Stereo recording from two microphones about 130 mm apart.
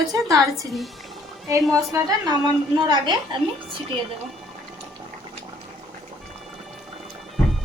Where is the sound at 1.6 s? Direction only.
Centre (ahead or behind).